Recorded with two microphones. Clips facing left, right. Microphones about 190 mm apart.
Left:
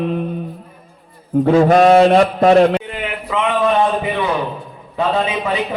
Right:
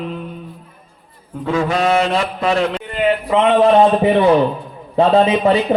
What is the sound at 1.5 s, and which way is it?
Mantra, 40° left (ahead or behind).